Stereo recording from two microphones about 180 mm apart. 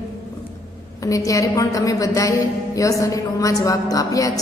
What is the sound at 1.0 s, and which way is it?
A woman's voice, 20° left (ahead or behind).